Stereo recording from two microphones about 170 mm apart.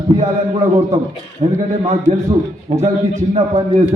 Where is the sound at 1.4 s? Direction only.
35° right (ahead or behind).